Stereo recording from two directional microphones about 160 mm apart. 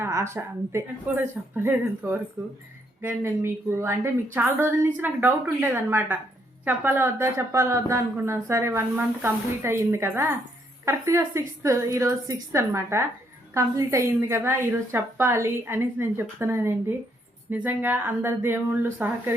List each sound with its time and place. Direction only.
0.0 s speech: 15° right (ahead or behind)